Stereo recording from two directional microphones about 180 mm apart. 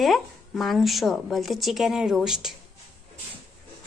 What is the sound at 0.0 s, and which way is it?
Speech, centre (ahead or behind).